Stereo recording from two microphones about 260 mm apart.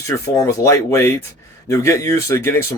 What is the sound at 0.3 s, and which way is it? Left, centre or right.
Speech, centre.